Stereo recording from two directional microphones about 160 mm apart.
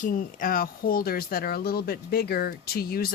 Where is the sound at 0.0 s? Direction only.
55° left (ahead or behind).